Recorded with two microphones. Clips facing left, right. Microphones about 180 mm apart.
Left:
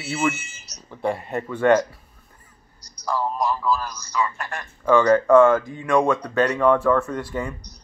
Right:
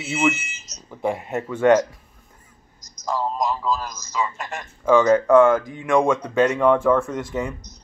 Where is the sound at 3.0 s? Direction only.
20° right (ahead or behind).